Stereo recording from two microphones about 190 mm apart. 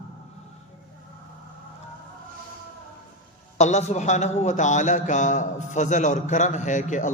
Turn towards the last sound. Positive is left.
turn(degrees=40)  # may be behind; listen again after turning